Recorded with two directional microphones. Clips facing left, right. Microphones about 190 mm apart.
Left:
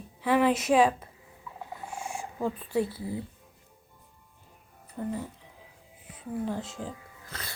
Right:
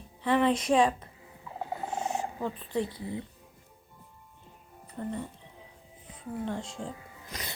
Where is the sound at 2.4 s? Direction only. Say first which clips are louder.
Left 7 dB; 5° left (ahead or behind).